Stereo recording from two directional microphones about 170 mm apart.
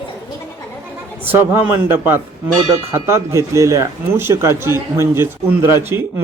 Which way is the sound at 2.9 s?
15° right (ahead or behind).